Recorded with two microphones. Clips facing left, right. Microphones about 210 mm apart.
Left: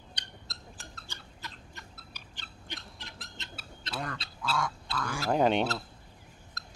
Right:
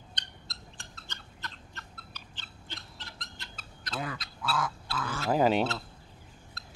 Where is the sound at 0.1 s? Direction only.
5° left (ahead or behind).